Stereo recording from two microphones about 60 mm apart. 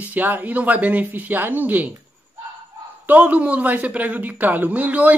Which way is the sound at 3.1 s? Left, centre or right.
Right.